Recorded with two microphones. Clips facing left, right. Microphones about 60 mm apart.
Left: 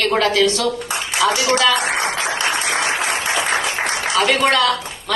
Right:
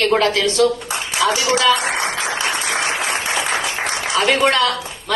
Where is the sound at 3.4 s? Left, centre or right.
Left.